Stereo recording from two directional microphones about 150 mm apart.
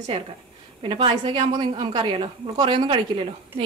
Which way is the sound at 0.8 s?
40° right (ahead or behind).